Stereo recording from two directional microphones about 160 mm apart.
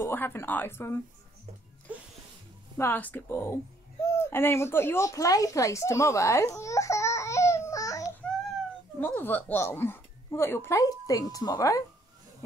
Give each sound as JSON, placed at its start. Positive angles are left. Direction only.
{"t": 0.0, "sound": "speech", "side_deg": 15}
{"t": 2.8, "sound": "speech", "side_deg": 10}